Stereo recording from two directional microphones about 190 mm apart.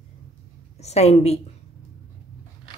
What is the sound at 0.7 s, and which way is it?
Speech, 35° left (ahead or behind).